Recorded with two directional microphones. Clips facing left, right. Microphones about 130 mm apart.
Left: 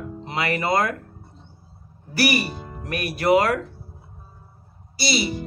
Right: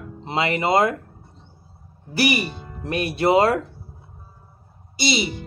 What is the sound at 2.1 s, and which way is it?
Speech, 20° right (ahead or behind).